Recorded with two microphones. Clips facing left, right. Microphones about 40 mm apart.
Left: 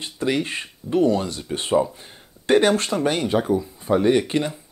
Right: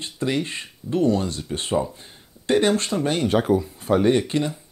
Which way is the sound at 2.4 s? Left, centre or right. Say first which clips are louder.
Left 2 dB; left.